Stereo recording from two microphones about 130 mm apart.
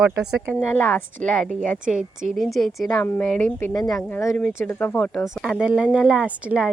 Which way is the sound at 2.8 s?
20° left (ahead or behind).